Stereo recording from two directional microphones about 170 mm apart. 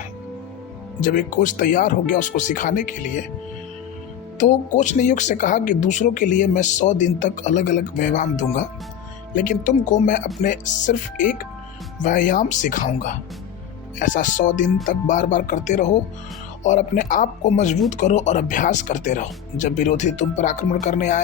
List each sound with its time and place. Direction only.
1.0 s speech: 50° left (ahead or behind)
4.4 s speech: 45° left (ahead or behind)